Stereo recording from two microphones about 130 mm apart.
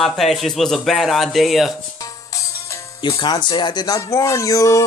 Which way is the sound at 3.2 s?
35° left (ahead or behind).